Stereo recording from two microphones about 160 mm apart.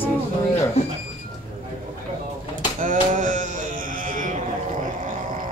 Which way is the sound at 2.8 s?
55° right (ahead or behind).